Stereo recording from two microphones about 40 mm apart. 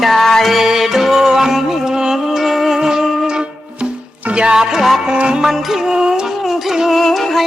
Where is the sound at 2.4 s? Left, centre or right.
Centre.